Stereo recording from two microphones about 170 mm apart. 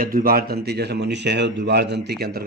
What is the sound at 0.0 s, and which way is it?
Speech, 55° right (ahead or behind).